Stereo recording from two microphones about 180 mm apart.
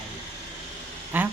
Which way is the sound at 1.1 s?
10° right (ahead or behind).